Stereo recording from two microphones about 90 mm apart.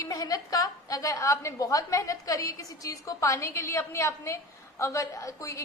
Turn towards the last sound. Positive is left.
turn(degrees=35)  # may be behind; listen again after turning